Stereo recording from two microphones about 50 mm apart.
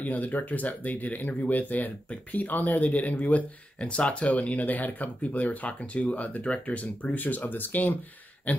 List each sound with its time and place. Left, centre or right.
0.0 s speech: left